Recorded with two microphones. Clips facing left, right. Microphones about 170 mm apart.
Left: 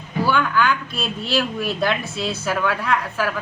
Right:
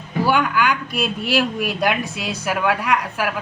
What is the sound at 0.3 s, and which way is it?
Speech, 15° right (ahead or behind).